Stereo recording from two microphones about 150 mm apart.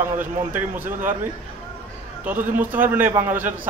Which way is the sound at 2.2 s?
10° right (ahead or behind).